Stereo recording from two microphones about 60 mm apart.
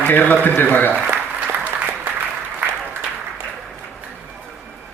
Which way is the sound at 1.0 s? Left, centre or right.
Right.